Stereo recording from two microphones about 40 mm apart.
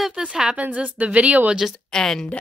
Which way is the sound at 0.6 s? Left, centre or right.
Right.